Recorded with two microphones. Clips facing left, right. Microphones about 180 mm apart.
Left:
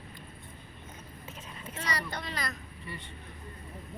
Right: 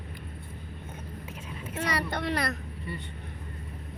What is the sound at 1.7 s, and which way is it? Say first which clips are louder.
Speech: right 6 dB; 55° right (ahead or behind).